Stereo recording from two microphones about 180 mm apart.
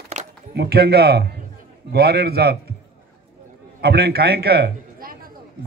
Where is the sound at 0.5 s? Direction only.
65° right (ahead or behind).